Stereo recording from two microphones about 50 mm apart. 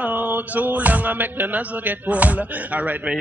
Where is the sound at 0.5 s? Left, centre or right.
Right.